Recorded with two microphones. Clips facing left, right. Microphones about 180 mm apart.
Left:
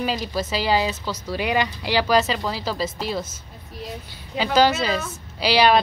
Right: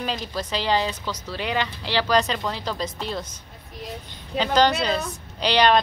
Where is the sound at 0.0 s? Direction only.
10° left (ahead or behind).